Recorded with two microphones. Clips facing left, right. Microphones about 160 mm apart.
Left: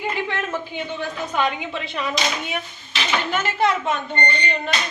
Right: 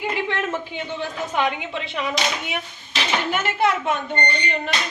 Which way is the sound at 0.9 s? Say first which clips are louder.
Even; 20° right (ahead or behind).